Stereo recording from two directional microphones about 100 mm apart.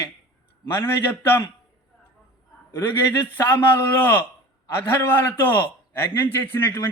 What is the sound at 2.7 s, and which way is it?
A man's voice, 25° left (ahead or behind).